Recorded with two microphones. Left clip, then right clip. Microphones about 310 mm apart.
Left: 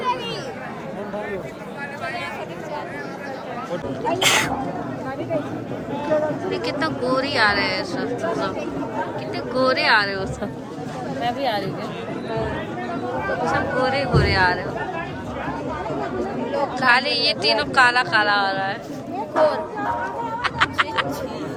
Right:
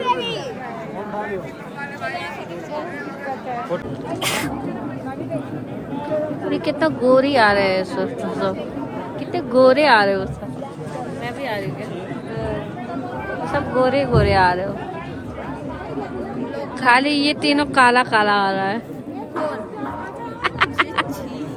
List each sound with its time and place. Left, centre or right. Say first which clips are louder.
4.2 s speech: left 5 dB; left
6.5 s a woman's voice: right 4 dB; centre
11.2 s speech: left 5 dB; centre
13.5 s a woman's voice: right 5 dB; centre
16.8 s a woman's voice: right 3 dB; centre
20.4 s a sound: right 2 dB; right